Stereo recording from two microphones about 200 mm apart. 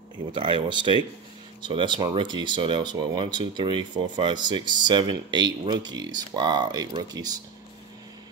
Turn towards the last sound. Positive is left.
turn(degrees=-20)  # may be behind; listen again after turning